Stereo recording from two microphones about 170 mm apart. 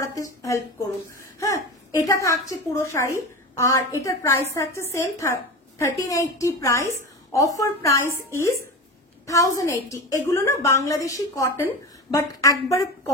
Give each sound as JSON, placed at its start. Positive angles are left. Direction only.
{"t": 0.1, "sound": "a woman's voice", "side_deg": 20}
{"t": 1.4, "sound": "a sound", "side_deg": 20}
{"t": 2.2, "sound": "a woman's voice", "side_deg": 15}